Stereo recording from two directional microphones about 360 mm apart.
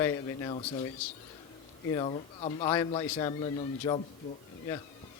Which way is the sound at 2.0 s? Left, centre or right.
Centre.